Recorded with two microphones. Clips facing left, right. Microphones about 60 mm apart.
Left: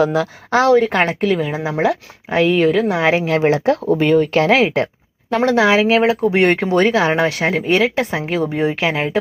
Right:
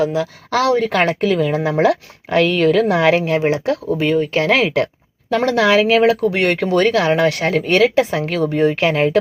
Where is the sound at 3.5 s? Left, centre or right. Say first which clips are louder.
Left 3 dB; left.